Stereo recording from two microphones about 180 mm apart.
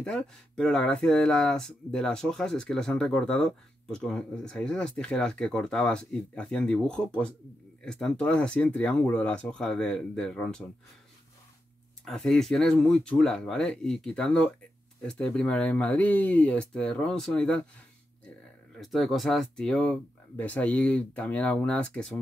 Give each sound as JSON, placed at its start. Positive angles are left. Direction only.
{"t": 0.0, "sound": "speech", "side_deg": 5}
{"t": 12.0, "sound": "speech", "side_deg": 0}
{"t": 18.8, "sound": "speech", "side_deg": 0}